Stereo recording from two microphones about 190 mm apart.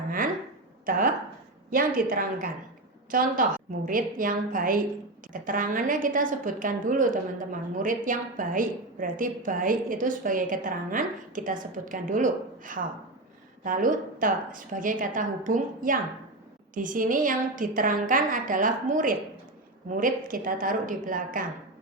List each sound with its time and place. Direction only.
0.9 s a woman's voice: 45° right (ahead or behind)